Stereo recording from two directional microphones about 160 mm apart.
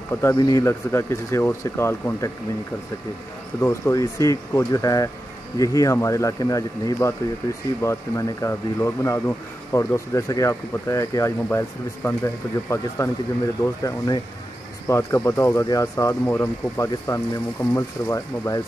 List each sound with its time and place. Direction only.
0.2 s speech: 20° left (ahead or behind)
3.6 s speech: 20° left (ahead or behind)